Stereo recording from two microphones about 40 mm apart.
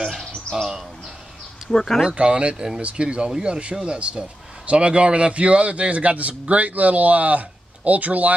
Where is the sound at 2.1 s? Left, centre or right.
Right.